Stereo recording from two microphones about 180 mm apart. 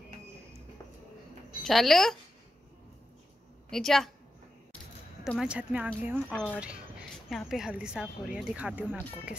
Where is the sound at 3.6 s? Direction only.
Centre (ahead or behind).